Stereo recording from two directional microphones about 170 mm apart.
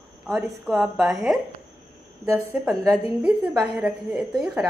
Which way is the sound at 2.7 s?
20° right (ahead or behind).